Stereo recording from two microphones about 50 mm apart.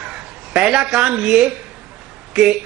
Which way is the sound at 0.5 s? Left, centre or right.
Centre.